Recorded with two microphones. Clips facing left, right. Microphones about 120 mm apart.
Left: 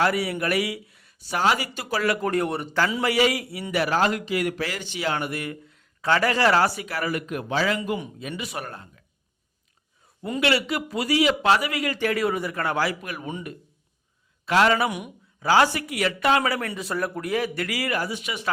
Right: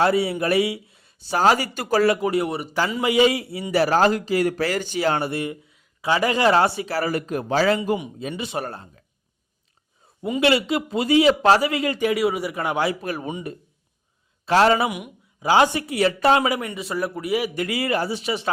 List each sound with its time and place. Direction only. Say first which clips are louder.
0.0 s a man's voice: right 4 dB; 25° right (ahead or behind); by 2.0 s 45° right (ahead or behind)
2.2 s speech: right 2 dB; 5° right (ahead or behind)
3.0 s a man's voice: right 7 dB; 20° right (ahead or behind)
5.6 s a man's voice: even; 10° right (ahead or behind); by 9.0 s 30° right (ahead or behind)
10.4 s a man's voice: right 4 dB; 25° right (ahead or behind)
11.9 s speech: right 1 dB; 15° right (ahead or behind)
14.4 s a man's voice: right 3 dB; 30° right (ahead or behind)
14.8 s speech: right 1 dB; 5° right (ahead or behind)
15.4 s a man's voice: right 2 dB; 20° right (ahead or behind)
16.4 s speech: right 3 dB; 15° right (ahead or behind)
16.6 s speech: right 1 dB; centre (ahead or behind); by 18.5 s 30° right (ahead or behind)